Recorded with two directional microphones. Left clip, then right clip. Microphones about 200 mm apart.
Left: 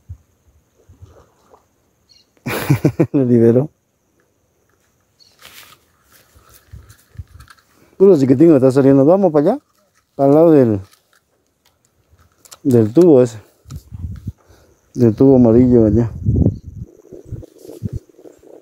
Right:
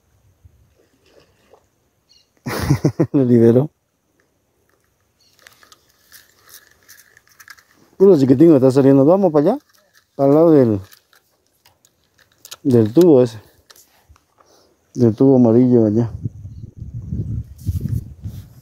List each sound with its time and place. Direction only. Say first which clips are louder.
1.5 s boat: left 2 dB; 10° left (ahead or behind)
2.4 s a sound: left 2 dB; 5° left (ahead or behind)
3.2 s speech: even; 5° right (ahead or behind)
8.0 s speech: left 1 dB; centre (ahead or behind)
10.9 s a sound: right 3 dB; 25° right (ahead or behind)
12.6 s speech: left 1 dB; 5° left (ahead or behind)
14.5 s speech: even; 5° left (ahead or behind)